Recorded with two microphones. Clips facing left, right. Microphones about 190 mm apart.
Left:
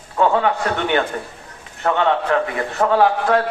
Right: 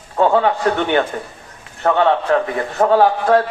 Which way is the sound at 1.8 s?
35° right (ahead or behind).